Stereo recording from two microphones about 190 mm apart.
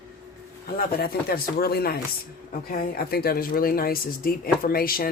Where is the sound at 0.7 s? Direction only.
50° left (ahead or behind).